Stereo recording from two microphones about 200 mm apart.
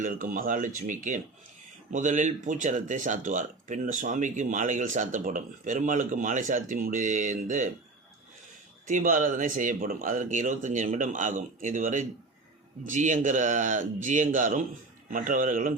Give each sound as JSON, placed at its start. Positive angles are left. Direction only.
{"t": 0.0, "sound": "speech", "side_deg": -40}
{"t": 8.9, "sound": "speech", "side_deg": -40}